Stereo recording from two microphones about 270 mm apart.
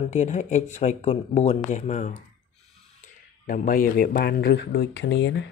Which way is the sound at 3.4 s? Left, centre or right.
Left.